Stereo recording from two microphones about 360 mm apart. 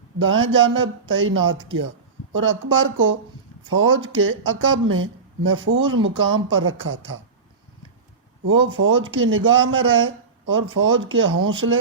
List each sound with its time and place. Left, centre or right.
0.2 s speech: right
8.4 s speech: right